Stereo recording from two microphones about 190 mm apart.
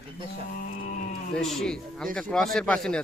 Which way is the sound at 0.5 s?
45° left (ahead or behind).